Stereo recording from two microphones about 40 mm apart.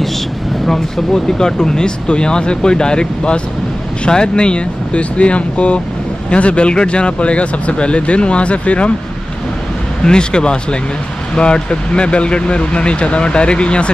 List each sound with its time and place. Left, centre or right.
0.7 s speech: centre; by 8.9 s left
10.0 s speech: left